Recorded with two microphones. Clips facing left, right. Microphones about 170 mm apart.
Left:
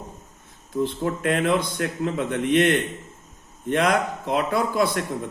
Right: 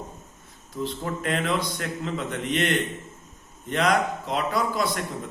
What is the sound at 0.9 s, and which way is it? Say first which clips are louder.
A man's voice: left 1 dB; 50° left (ahead or behind).